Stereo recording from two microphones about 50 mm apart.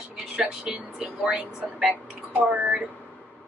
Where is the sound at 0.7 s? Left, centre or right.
Right.